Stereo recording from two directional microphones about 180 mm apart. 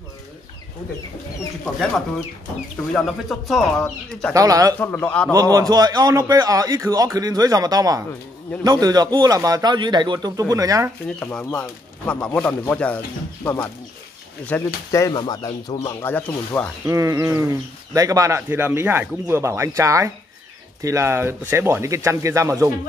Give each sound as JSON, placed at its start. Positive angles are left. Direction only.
{"t": 2.9, "sound": "speech", "side_deg": 0}
{"t": 4.3, "sound": "a man's voice", "side_deg": -20}
{"t": 4.7, "sound": "speech", "side_deg": 10}
{"t": 5.3, "sound": "a man's voice", "side_deg": -20}
{"t": 11.1, "sound": "speech", "side_deg": 5}
{"t": 16.0, "sound": "speech", "side_deg": 10}
{"t": 16.8, "sound": "speech", "side_deg": -15}